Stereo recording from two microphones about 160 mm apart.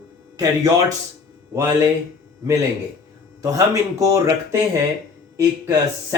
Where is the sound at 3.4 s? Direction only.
20° right (ahead or behind).